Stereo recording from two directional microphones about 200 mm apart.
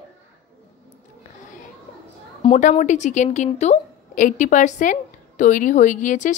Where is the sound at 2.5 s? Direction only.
40° left (ahead or behind).